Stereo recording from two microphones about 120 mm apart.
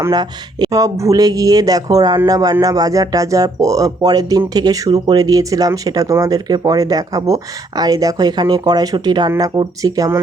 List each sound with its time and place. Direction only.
0.1 s speech: 35° right (ahead or behind)